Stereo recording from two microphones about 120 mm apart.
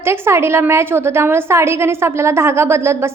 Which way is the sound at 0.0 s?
20° right (ahead or behind).